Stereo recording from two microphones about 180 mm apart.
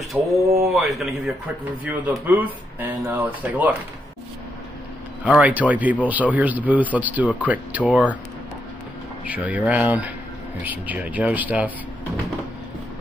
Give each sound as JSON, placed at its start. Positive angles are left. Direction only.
{"t": 0.2, "sound": "speech", "side_deg": -5}
{"t": 5.2, "sound": "speech", "side_deg": -5}
{"t": 9.2, "sound": "speech", "side_deg": -5}